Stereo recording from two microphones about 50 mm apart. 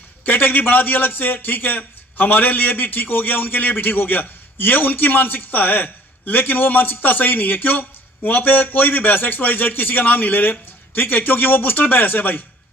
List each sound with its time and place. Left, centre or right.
0.2 s a man's voice: left